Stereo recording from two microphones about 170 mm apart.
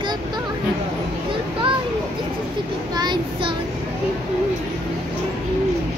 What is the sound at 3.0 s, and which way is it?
Speech, 25° right (ahead or behind).